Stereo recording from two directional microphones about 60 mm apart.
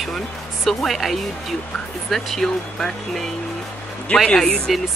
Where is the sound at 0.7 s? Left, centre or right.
Centre.